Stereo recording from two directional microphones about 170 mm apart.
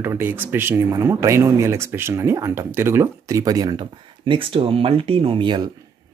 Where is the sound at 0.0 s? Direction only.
10° right (ahead or behind).